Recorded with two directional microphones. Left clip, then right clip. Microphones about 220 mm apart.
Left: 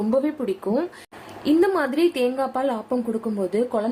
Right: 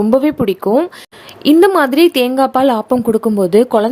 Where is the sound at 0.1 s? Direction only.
40° right (ahead or behind).